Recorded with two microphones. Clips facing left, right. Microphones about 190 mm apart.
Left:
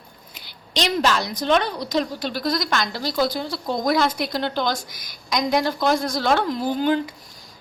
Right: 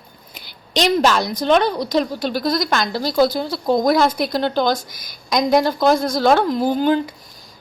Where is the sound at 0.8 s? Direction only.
45° right (ahead or behind).